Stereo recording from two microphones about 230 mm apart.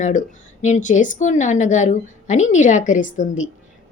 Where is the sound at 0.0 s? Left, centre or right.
Left.